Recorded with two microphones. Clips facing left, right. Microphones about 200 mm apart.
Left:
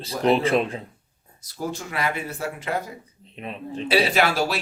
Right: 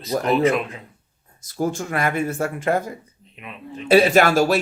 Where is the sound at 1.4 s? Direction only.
50° right (ahead or behind).